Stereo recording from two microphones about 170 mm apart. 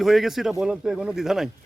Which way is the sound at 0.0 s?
Centre (ahead or behind).